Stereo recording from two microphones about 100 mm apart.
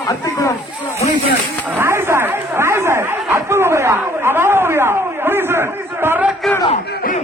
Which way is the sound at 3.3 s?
25° right (ahead or behind).